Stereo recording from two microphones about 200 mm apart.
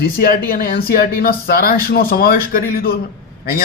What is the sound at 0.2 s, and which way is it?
Speech, 50° left (ahead or behind).